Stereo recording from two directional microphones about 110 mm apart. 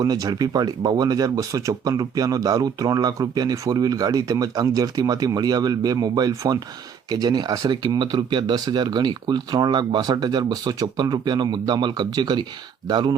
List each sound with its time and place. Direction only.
0.0 s speech: 35° right (ahead or behind)